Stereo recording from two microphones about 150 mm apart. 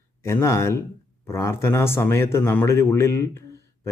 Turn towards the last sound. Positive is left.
turn(degrees=20)  # may be behind; listen again after turning